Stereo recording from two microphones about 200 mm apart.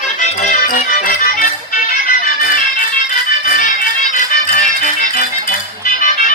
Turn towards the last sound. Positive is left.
turn(degrees=40)  # may be behind; listen again after turning